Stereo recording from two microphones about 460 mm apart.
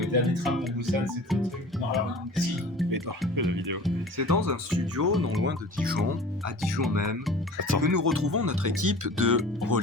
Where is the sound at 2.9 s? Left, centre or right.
Right.